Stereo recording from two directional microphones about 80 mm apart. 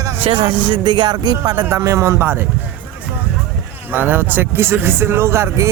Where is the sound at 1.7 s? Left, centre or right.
Right.